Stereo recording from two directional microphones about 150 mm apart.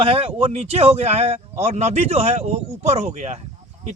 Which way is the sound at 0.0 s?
40° right (ahead or behind).